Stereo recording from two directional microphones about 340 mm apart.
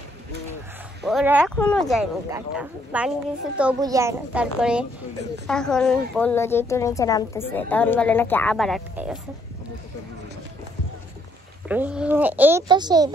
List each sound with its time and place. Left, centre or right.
1.0 s a woman's voice: centre
11.6 s a woman's voice: centre